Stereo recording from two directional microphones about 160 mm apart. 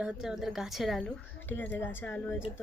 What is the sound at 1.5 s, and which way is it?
Speech, 10° left (ahead or behind).